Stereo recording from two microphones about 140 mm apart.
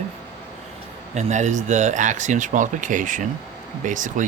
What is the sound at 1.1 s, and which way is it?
Speech, 60° right (ahead or behind).